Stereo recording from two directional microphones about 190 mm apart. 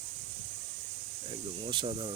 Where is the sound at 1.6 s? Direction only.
25° right (ahead or behind).